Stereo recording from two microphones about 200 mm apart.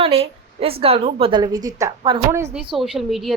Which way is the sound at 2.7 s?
Centre (ahead or behind).